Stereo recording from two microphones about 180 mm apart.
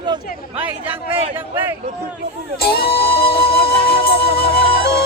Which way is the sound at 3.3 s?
30° left (ahead or behind).